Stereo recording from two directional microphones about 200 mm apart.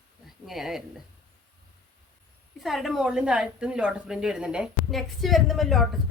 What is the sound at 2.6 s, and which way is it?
Speech, centre (ahead or behind).